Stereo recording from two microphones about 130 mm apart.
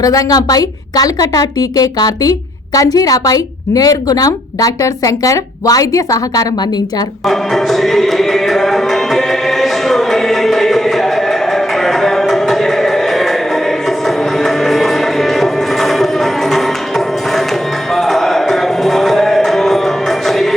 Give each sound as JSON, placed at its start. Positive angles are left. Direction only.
{"t": 0.0, "sound": "a woman's voice", "side_deg": 25}
{"t": 7.3, "sound": "music", "side_deg": 0}
{"t": 14.3, "sound": "music", "side_deg": 0}
{"t": 17.9, "sound": "music", "side_deg": 0}